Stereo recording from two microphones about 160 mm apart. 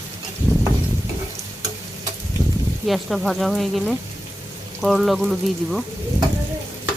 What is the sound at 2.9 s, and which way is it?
Stir, centre (ahead or behind).